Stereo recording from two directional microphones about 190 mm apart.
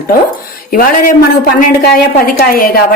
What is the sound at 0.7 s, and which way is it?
A woman's voice, 45° left (ahead or behind).